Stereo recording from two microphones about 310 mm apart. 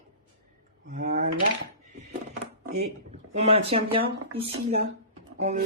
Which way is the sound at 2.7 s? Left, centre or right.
Right.